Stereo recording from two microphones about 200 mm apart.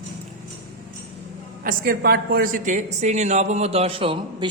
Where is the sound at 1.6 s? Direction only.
50° right (ahead or behind); by 4.5 s 25° right (ahead or behind).